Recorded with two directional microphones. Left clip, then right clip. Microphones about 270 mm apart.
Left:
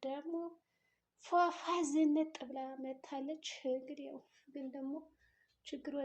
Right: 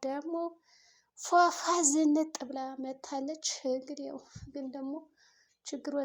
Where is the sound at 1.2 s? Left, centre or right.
Right.